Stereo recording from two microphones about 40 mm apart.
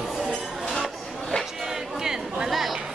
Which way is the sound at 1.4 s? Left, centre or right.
Centre.